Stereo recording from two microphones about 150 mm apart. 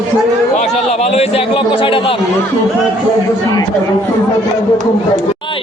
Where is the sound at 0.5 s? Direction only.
45° left (ahead or behind).